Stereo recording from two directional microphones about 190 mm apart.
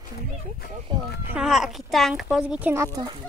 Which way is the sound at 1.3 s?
5° right (ahead or behind).